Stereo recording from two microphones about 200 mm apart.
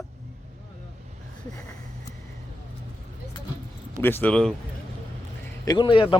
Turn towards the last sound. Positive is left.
turn(degrees=25)  # may be behind; listen again after turning